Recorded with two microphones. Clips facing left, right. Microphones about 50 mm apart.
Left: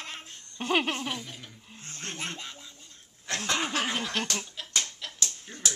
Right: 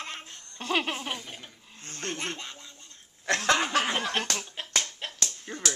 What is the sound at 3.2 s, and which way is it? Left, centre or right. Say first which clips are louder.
Speech: right 6 dB; right.